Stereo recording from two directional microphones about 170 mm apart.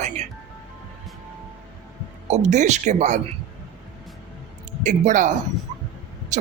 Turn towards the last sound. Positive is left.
turn(degrees=-45)  # may be behind; listen again after turning